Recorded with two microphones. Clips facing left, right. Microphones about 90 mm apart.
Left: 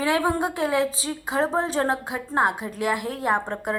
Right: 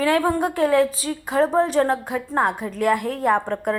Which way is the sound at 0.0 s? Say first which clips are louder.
Right 3 dB; 20° left (ahead or behind).